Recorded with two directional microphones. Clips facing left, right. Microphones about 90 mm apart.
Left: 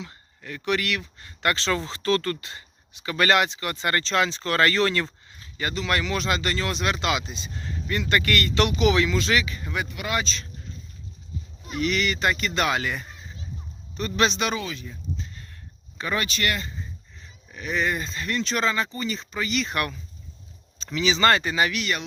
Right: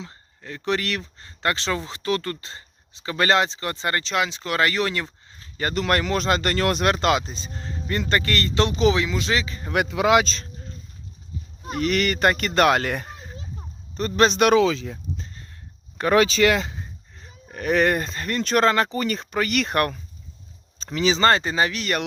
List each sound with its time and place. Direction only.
0.0 s speech: 30° right (ahead or behind)
4.0 s speech: 10° right (ahead or behind)
5.5 s speech: 45° right (ahead or behind)
9.7 s speech: 85° right
10.2 s speech: 40° right (ahead or behind)
11.6 s speech: 45° right (ahead or behind)
13.9 s a man's voice: 40° right (ahead or behind)
14.3 s speech: 75° right (ahead or behind)
16.0 s speech: 75° right (ahead or behind)
17.2 s speech: 50° right (ahead or behind)
20.7 s speech: 40° right (ahead or behind)